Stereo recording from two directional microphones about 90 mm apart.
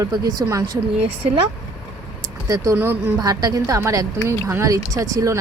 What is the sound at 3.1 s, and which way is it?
Speech, 45° right (ahead or behind).